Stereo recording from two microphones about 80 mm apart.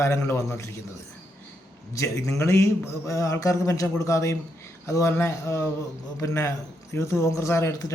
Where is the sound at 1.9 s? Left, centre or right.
Left.